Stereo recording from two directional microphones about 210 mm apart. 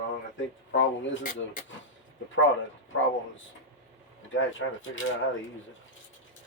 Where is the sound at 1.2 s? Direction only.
40° left (ahead or behind).